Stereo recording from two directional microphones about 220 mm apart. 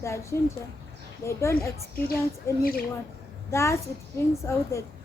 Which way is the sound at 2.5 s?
10° left (ahead or behind).